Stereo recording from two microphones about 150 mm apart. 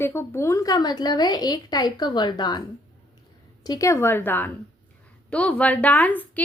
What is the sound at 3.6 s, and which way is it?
A woman's voice, 20° left (ahead or behind).